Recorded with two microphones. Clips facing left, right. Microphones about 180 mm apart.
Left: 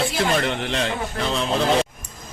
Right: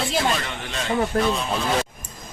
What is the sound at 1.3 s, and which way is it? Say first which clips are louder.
Speech: left 3 dB; 90° left.